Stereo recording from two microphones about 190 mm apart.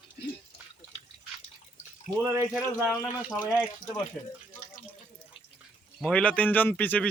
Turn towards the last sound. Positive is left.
turn(degrees=10)  # may be behind; listen again after turning